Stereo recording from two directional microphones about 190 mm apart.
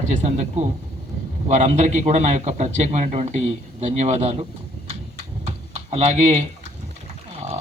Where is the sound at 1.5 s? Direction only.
40° right (ahead or behind).